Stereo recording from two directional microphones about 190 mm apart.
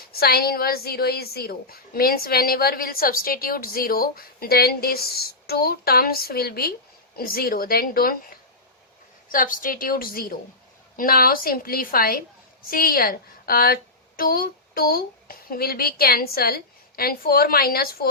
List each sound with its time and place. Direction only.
0.2 s a woman's voice: 55° left (ahead or behind)
9.3 s a woman's voice: 45° left (ahead or behind)